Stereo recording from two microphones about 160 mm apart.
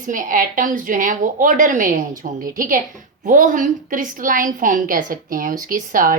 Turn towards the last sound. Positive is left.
turn(degrees=-60)  # may be behind; listen again after turning